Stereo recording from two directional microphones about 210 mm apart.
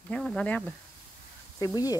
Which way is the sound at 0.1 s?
5° left (ahead or behind).